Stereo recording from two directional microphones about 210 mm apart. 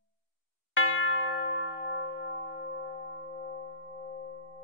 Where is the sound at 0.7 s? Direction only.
70° left (ahead or behind).